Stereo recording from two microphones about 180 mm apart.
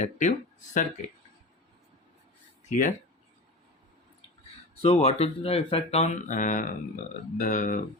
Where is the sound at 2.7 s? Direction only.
45° left (ahead or behind).